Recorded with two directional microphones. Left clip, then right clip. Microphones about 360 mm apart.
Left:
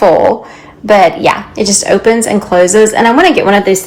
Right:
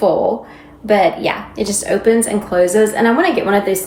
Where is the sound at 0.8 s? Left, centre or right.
Left.